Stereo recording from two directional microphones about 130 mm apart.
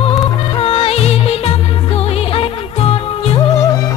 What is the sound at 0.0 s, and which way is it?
Music, 50° left (ahead or behind).